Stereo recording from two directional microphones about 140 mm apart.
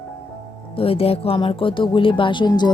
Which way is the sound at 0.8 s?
45° left (ahead or behind).